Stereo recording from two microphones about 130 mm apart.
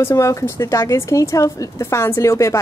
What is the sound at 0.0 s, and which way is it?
Speech, 20° left (ahead or behind).